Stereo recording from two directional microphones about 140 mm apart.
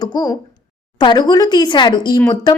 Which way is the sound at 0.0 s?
30° left (ahead or behind).